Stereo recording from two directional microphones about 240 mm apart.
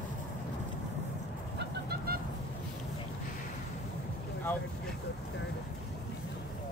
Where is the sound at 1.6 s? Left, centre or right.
Right.